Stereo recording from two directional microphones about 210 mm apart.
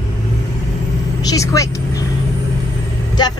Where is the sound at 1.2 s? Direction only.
15° left (ahead or behind).